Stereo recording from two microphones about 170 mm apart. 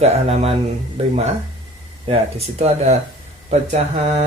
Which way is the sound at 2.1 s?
35° right (ahead or behind).